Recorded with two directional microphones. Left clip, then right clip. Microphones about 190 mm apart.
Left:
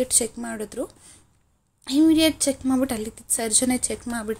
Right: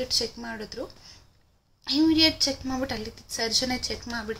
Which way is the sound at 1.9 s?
30° left (ahead or behind).